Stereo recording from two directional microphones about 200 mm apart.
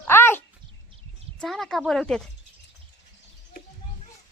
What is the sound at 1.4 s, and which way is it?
Speech, centre (ahead or behind).